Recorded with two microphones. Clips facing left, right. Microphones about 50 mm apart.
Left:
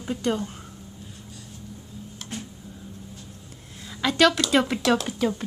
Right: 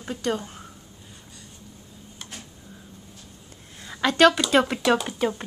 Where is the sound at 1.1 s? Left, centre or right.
Centre.